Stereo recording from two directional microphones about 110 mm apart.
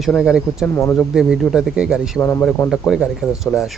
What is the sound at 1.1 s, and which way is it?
Speech, 5° right (ahead or behind).